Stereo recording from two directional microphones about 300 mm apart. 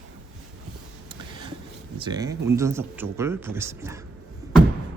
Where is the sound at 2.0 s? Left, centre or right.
Centre.